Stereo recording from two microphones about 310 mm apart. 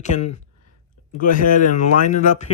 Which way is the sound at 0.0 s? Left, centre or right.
Left.